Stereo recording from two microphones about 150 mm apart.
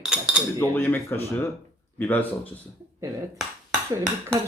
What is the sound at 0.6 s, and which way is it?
Speech, 15° left (ahead or behind).